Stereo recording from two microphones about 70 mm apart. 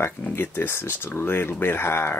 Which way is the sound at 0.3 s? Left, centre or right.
Left.